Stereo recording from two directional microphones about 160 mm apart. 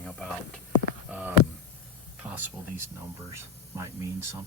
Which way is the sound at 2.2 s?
10° right (ahead or behind).